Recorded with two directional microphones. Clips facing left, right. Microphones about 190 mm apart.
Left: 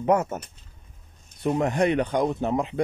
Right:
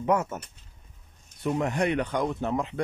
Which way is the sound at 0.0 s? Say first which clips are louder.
Left 3 dB; 35° left (ahead or behind).